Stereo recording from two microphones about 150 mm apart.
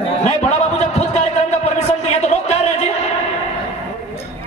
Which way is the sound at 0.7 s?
50° left (ahead or behind).